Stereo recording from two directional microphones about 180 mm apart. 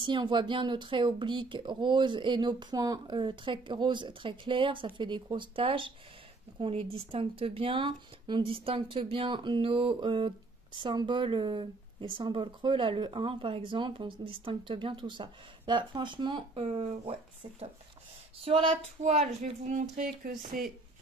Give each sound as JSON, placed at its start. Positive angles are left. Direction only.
{"t": 0.0, "sound": "speech", "side_deg": -25}